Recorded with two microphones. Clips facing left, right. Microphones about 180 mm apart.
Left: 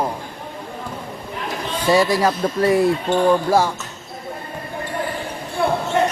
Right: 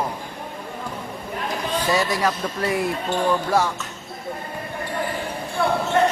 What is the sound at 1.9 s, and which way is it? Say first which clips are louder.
Speech: left 7 dB; 30° left (ahead or behind).